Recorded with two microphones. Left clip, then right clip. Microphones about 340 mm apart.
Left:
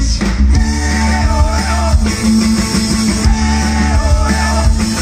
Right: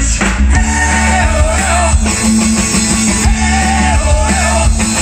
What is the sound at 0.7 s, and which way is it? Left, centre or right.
Music, right.